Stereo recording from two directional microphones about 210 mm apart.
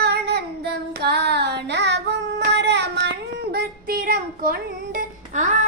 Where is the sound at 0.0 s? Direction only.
50° right (ahead or behind).